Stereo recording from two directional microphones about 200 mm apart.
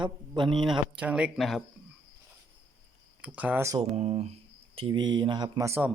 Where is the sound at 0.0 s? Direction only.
25° right (ahead or behind).